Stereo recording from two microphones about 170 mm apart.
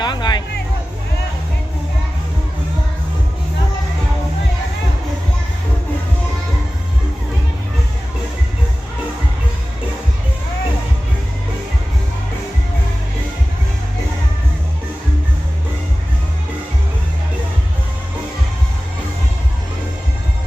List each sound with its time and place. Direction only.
0.0 s music: 25° left (ahead or behind)